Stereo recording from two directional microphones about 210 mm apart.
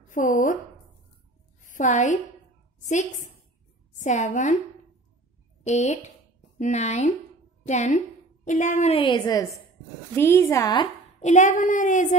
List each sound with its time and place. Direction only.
0.1 s speech: 40° left (ahead or behind)
1.6 s a woman's voice: 35° left (ahead or behind)
5.7 s a woman's voice: 35° left (ahead or behind)
11.1 s a woman's voice: 35° left (ahead or behind)